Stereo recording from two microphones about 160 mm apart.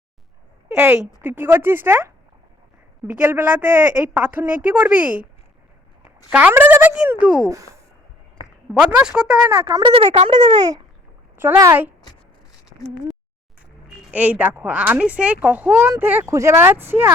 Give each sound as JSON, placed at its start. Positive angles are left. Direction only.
{"t": 0.8, "sound": "speech", "side_deg": -10}
{"t": 3.2, "sound": "speech", "side_deg": -10}
{"t": 6.3, "sound": "speech", "side_deg": -10}
{"t": 8.4, "sound": "a sound", "side_deg": 30}
{"t": 9.0, "sound": "speech", "side_deg": -5}
{"t": 9.7, "sound": "speech", "side_deg": -35}
{"t": 11.3, "sound": "speech", "side_deg": -15}
{"t": 14.1, "sound": "speech", "side_deg": -10}